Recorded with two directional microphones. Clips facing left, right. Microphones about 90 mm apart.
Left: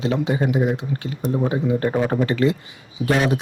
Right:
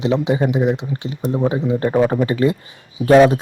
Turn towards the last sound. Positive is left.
turn(degrees=-40)  # may be behind; listen again after turning